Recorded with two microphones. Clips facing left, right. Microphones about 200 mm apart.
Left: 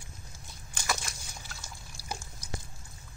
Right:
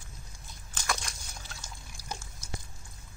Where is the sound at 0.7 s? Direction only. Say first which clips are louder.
Even; 5° left (ahead or behind).